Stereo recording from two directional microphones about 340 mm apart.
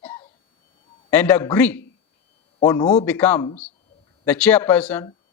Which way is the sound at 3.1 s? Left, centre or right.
Centre.